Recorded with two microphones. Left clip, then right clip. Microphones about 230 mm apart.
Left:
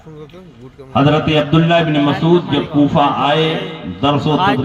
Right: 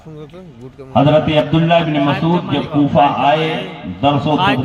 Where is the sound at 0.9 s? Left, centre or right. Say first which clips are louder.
Right 1 dB; left.